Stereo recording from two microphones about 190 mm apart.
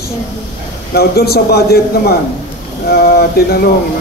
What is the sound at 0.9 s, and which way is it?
A man's voice, 55° left (ahead or behind).